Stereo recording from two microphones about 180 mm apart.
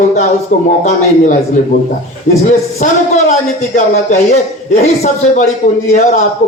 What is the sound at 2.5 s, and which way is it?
A man's voice, 40° left (ahead or behind).